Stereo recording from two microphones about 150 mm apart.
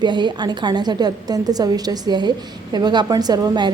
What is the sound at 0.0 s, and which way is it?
A woman's voice, 30° right (ahead or behind).